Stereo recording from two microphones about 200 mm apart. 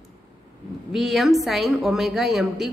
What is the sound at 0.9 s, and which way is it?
Speech, centre (ahead or behind).